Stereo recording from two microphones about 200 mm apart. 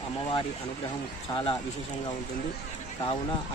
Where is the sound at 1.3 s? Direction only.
25° left (ahead or behind).